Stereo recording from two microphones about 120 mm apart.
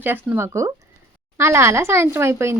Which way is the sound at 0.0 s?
15° right (ahead or behind).